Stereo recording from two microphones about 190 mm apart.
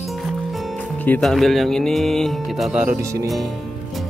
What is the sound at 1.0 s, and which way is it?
Speech, 5° left (ahead or behind).